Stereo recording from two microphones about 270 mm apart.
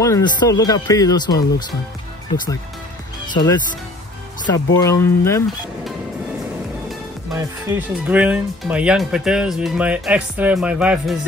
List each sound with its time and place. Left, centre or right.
0.0 s speech: centre
4.8 s speech: centre
7.3 s speech: centre